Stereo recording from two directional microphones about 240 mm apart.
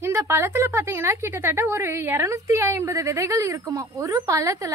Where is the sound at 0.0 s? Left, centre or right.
Centre.